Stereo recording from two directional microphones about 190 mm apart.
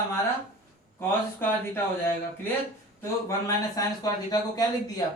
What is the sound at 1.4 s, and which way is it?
Speech, 10° left (ahead or behind).